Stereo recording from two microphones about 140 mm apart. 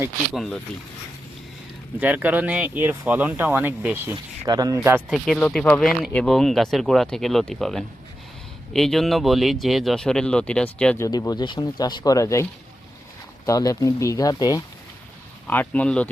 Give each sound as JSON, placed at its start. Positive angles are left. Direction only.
{"t": 0.3, "sound": "speech", "side_deg": 5}
{"t": 2.0, "sound": "speech", "side_deg": -10}
{"t": 4.1, "sound": "speech", "side_deg": -30}
{"t": 4.8, "sound": "speech", "side_deg": -15}
{"t": 5.1, "sound": "speech", "side_deg": 0}
{"t": 11.2, "sound": "speech", "side_deg": 30}
{"t": 15.4, "sound": "speech", "side_deg": 10}